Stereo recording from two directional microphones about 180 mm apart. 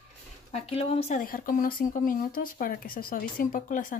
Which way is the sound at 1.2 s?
50° left (ahead or behind).